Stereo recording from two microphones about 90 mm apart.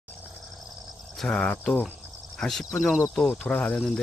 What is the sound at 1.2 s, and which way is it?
Speech, 10° left (ahead or behind).